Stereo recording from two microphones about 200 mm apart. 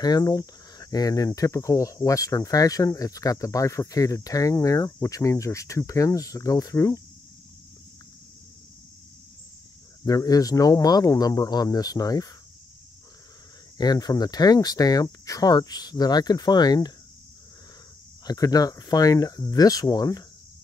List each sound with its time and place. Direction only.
0.0 s speech: 20° left (ahead or behind)
10.0 s speech: 15° left (ahead or behind)
13.7 s speech: 20° left (ahead or behind)
18.2 s speech: 20° left (ahead or behind)